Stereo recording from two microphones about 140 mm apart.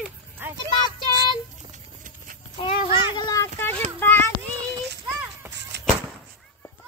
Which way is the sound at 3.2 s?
30° left (ahead or behind).